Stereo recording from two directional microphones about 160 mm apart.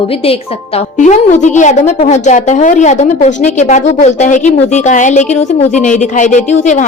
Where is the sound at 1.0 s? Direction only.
50° left (ahead or behind).